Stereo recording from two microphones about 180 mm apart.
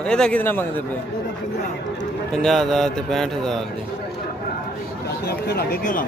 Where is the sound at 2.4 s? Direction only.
Centre (ahead or behind).